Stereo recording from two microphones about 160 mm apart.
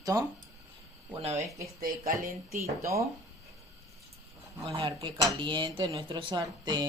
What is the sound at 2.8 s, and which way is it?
Speech, 20° right (ahead or behind).